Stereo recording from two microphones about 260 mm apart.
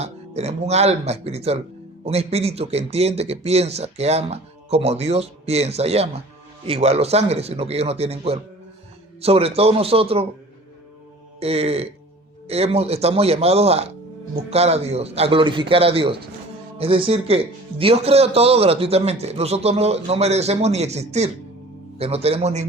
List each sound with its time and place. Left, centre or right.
0.0 s speech: right
11.3 s speech: right